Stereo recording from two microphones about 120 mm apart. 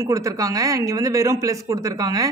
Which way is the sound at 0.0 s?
25° right (ahead or behind).